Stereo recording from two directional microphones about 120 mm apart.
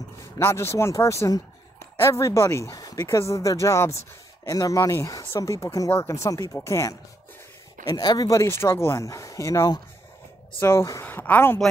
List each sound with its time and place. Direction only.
0.2 s speech: 20° left (ahead or behind)